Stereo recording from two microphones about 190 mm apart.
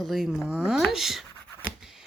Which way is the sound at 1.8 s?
Centre (ahead or behind).